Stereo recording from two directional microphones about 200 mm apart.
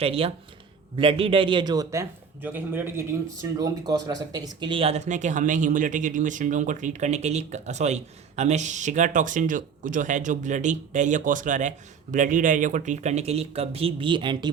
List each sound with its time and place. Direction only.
0.0 s a man's voice: 30° right (ahead or behind)